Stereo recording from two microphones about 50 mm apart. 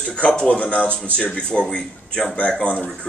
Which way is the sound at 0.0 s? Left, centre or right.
Centre.